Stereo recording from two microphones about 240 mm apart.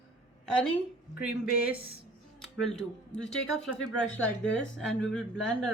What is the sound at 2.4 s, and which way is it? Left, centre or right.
Speech, centre.